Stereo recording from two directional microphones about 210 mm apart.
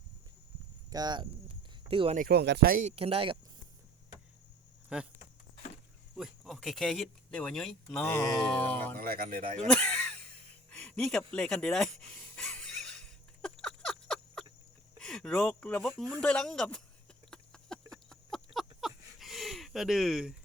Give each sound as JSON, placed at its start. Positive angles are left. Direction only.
{"t": 0.9, "sound": "speech", "side_deg": -20}
{"t": 2.1, "sound": "speech", "side_deg": -45}
{"t": 2.9, "sound": "speech", "side_deg": -25}
{"t": 4.9, "sound": "speech", "side_deg": -5}
{"t": 6.1, "sound": "speech", "side_deg": 0}
{"t": 9.0, "sound": "speech", "side_deg": -45}
{"t": 9.6, "sound": "a sound", "side_deg": 5}
{"t": 14.9, "sound": "speech", "side_deg": 5}
{"t": 17.3, "sound": "a sound", "side_deg": 5}